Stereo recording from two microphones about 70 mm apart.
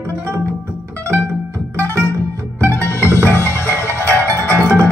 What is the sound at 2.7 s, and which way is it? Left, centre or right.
Music, left.